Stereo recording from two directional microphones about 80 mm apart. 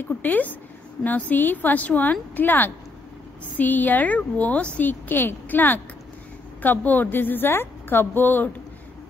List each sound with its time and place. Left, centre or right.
0.0 s a woman's voice: left